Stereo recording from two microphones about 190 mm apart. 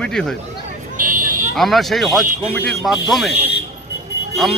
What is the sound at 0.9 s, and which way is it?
Vehicle, 45° right (ahead or behind).